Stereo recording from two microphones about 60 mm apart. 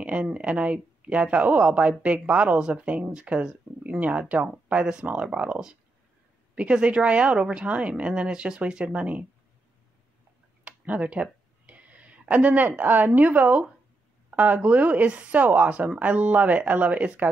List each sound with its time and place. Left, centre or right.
0.0 s speech: centre
10.6 s a sound: right
12.8 s speech: right